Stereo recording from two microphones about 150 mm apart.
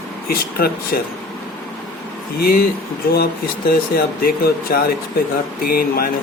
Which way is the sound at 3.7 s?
85° left.